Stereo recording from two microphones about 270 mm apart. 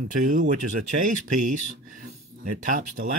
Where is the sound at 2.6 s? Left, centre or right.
Right.